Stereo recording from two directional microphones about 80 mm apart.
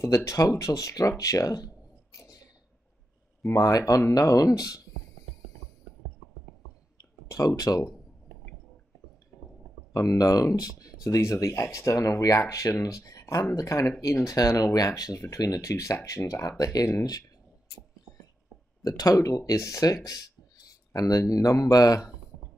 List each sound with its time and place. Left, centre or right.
0.0 s speech: left
3.4 s speech: left
7.2 s speech: left
9.9 s speech: left
18.8 s speech: left